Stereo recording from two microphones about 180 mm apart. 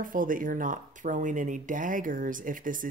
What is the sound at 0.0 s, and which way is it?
Speech, 50° right (ahead or behind).